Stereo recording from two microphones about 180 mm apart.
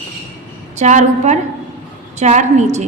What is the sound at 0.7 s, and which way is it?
A woman's voice, 40° right (ahead or behind).